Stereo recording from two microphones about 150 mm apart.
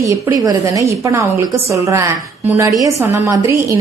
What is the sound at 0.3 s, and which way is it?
A woman's voice, 25° right (ahead or behind).